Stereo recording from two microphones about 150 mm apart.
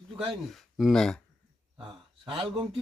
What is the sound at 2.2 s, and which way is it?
Speech, 35° right (ahead or behind).